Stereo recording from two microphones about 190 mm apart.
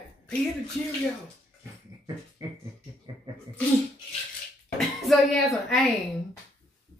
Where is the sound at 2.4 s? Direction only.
20° right (ahead or behind).